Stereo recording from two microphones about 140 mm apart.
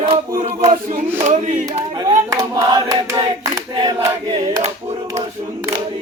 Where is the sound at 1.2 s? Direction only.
55° right (ahead or behind).